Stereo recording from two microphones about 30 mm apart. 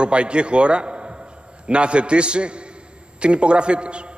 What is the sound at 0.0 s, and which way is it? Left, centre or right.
A man's voice, right.